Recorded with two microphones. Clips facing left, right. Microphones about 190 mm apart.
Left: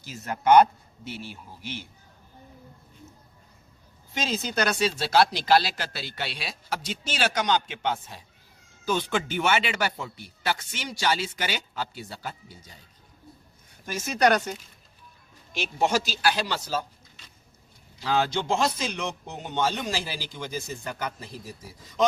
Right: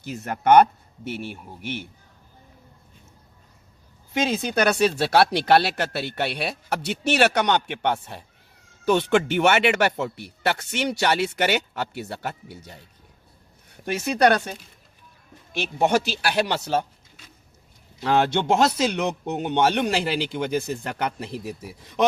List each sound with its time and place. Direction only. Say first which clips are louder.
0.0 s speech: right 3 dB; 55° right (ahead or behind)
4.2 s speech: right 5 dB; 60° right (ahead or behind)
13.7 s a sound: right 6 dB; 65° right (ahead or behind)
14.2 s speech: right 2 dB; 55° right (ahead or behind)
15.5 s speech: right 4 dB; 60° right (ahead or behind)
18.0 s speech: right 5 dB; 60° right (ahead or behind)